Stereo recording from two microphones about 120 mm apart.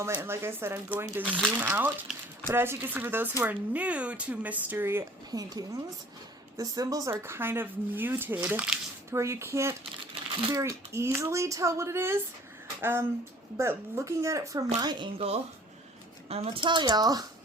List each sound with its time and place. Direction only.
0.1 s speech: 20° right (ahead or behind)
5.3 s speech: 30° right (ahead or behind); by 8.8 s 10° right (ahead or behind)
9.1 s speech: 25° right (ahead or behind)
14.8 s speech: 35° right (ahead or behind)
16.3 s a woman's voice: 55° right (ahead or behind)
16.6 s speech: 40° right (ahead or behind)